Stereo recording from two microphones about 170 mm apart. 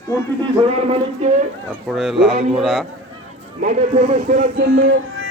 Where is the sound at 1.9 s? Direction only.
Centre (ahead or behind).